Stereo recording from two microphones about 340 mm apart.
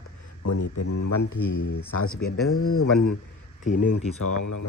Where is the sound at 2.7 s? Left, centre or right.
Left.